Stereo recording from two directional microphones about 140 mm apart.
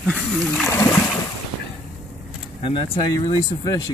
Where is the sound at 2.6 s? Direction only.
35° left (ahead or behind).